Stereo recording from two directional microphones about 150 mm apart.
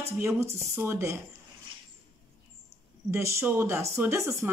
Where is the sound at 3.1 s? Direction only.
20° right (ahead or behind).